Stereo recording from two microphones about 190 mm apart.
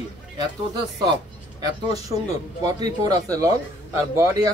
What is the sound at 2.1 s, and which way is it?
Speech, 25° right (ahead or behind).